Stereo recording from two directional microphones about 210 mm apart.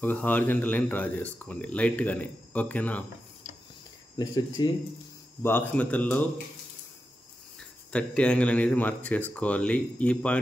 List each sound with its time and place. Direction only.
0.0 s speech: 10° left (ahead or behind)
4.6 s speech: 20° left (ahead or behind)
7.9 s speech: 5° left (ahead or behind)